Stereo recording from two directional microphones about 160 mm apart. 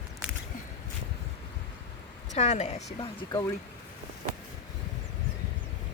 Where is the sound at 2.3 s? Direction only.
45° left (ahead or behind).